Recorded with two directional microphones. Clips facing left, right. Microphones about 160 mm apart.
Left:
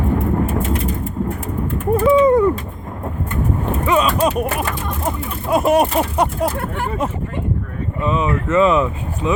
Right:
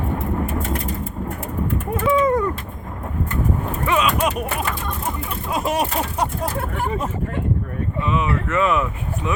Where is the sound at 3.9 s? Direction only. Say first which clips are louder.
Left 3 dB; 35° left (ahead or behind).